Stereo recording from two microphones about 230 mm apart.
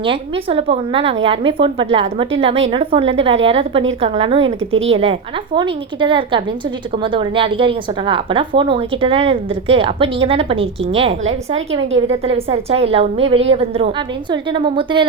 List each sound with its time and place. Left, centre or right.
0.0 s a woman's voice: right